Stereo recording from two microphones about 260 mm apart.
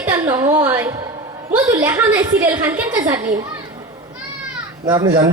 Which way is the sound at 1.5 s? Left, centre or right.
Centre.